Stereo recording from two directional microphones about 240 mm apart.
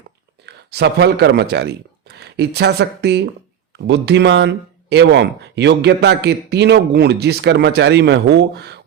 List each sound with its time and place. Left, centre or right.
0.4 s speech: right